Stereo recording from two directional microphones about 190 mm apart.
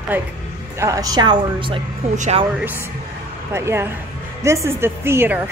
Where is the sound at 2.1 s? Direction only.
40° right (ahead or behind).